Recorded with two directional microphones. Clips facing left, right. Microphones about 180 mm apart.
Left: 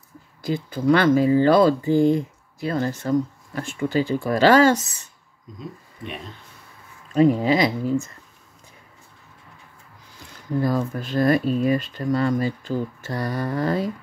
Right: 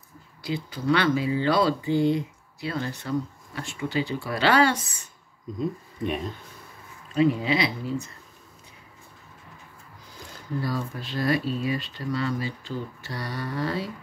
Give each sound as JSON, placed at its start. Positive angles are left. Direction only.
{"t": 0.4, "sound": "speech", "side_deg": 45}
{"t": 7.2, "sound": "speech", "side_deg": 45}
{"t": 10.6, "sound": "speech", "side_deg": 50}